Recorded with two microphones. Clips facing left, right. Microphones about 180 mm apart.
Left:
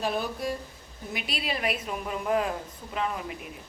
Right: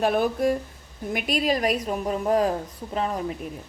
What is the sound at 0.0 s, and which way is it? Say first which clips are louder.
A woman's voice: right 8 dB; 55° right (ahead or behind).